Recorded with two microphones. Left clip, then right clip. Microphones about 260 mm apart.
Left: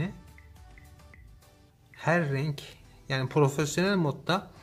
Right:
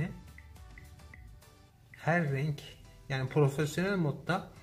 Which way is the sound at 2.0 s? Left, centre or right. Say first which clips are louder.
Left 4 dB; centre.